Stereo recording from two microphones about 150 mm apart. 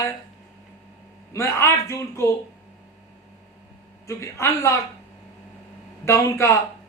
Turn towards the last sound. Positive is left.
turn(degrees=20)  # may be behind; listen again after turning